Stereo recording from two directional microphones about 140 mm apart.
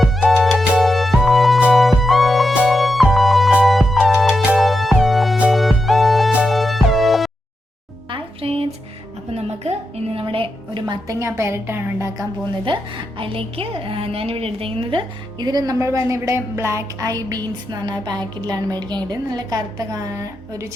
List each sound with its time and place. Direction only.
0.0 s music: centre (ahead or behind)
8.1 s a sound: 40° right (ahead or behind)
9.3 s music: 45° right (ahead or behind)
10.2 s a woman's voice: 40° right (ahead or behind); by 12.2 s 20° right (ahead or behind)
12.6 s a woman's voice: 35° right (ahead or behind)